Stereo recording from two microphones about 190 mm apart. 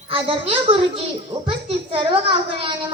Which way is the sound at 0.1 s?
30° right (ahead or behind).